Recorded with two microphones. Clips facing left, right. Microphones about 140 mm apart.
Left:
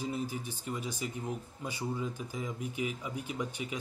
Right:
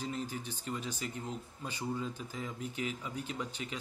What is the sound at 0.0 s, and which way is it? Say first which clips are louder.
Speech: left 3 dB; 10° left (ahead or behind).